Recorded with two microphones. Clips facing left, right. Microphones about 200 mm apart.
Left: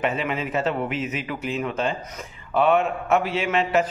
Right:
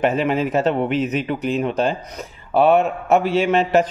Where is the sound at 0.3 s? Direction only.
35° right (ahead or behind).